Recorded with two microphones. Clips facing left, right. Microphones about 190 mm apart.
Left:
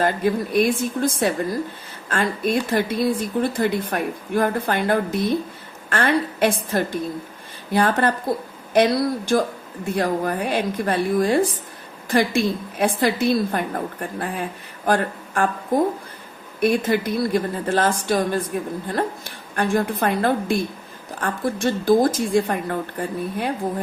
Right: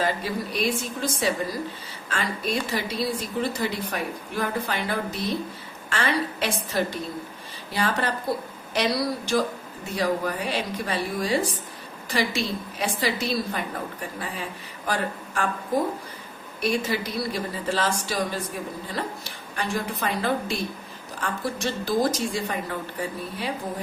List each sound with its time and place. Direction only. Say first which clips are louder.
0.0 s a woman's voice: left 6 dB; 55° left (ahead or behind)
16.6 s speech: left 6 dB; 55° left (ahead or behind)